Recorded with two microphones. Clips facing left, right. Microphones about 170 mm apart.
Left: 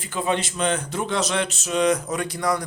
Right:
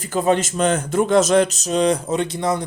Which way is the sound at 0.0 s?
40° right (ahead or behind).